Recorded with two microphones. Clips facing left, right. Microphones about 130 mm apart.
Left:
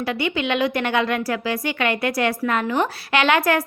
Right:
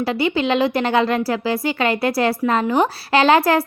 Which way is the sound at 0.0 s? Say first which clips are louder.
Right 4 dB; 30° right (ahead or behind).